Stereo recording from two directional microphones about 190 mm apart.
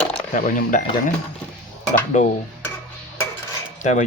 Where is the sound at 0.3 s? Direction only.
40° left (ahead or behind).